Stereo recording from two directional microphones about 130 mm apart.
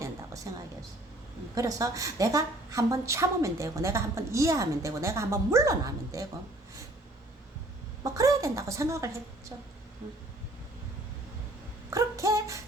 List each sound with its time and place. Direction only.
0.5 s a woman's voice: 30° right (ahead or behind)
8.0 s a woman's voice: 25° right (ahead or behind)
11.9 s a sound: 25° right (ahead or behind)